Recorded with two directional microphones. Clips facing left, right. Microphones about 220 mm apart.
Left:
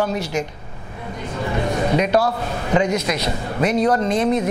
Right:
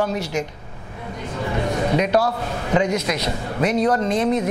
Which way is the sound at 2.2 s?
25° left (ahead or behind).